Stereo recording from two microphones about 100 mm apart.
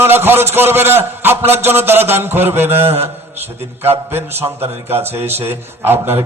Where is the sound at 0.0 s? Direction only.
20° right (ahead or behind).